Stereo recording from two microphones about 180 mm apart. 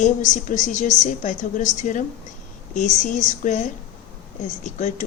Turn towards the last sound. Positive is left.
turn(degrees=40)  # may be behind; listen again after turning